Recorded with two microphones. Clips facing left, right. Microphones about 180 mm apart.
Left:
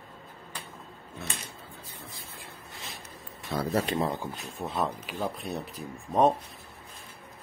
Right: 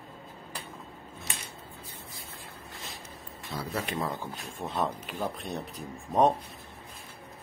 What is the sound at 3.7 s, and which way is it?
Speech, 35° left (ahead or behind).